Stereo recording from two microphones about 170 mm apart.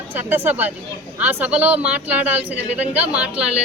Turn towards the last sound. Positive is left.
turn(degrees=-5)  # may be behind; listen again after turning